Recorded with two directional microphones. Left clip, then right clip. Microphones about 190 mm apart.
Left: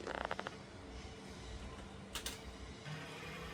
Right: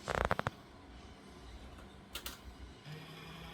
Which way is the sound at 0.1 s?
20° right (ahead or behind).